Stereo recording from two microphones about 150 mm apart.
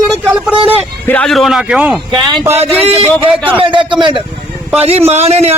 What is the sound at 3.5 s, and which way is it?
Speech, 35° right (ahead or behind).